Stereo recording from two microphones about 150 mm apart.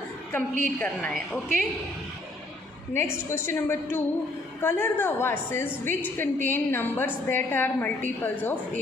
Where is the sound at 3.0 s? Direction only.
15° left (ahead or behind).